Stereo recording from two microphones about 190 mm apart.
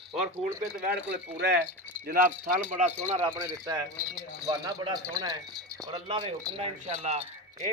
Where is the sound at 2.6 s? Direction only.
40° right (ahead or behind).